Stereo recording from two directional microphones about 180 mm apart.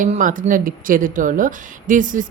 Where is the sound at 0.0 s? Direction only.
45° right (ahead or behind).